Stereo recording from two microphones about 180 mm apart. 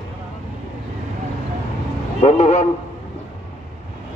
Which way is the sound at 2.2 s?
35° left (ahead or behind).